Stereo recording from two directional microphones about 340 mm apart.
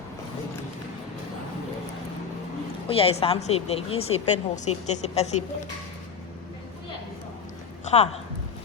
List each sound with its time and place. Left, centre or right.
2.8 s a woman's voice: centre
7.9 s speech: centre